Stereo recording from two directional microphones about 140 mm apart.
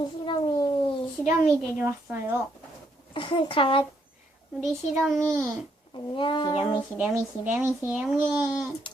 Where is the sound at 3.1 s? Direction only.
35° left (ahead or behind).